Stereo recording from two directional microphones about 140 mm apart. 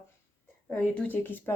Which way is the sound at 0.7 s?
10° left (ahead or behind).